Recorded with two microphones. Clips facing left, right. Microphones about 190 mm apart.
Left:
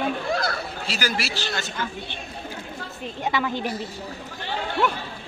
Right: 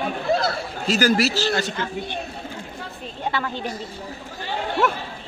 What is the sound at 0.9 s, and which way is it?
Speech, 40° right (ahead or behind).